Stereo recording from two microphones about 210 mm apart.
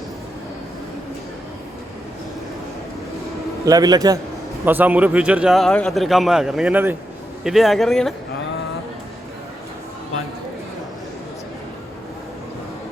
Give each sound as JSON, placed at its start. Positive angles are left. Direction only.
{"t": 3.7, "sound": "a man's voice", "side_deg": -15}